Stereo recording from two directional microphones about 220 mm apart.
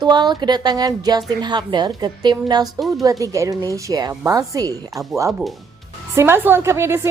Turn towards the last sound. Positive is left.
turn(degrees=-10)  # may be behind; listen again after turning